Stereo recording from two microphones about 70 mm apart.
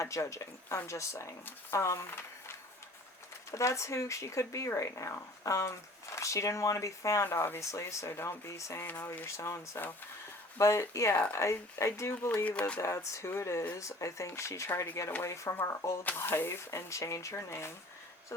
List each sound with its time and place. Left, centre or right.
0.0 s speech: left
3.5 s speech: left
7.3 s speech: left
7.6 s speech: left
12.5 s speech: centre
12.8 s speech: left
16.0 s speech: left